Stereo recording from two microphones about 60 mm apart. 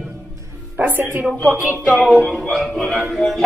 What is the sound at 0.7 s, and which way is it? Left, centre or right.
Speech, right.